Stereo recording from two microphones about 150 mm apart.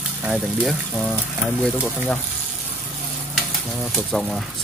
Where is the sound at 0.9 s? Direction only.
10° left (ahead or behind).